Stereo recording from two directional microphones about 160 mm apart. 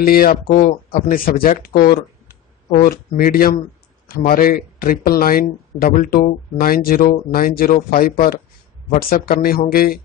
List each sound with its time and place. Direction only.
0.0 s speech: 65° left (ahead or behind)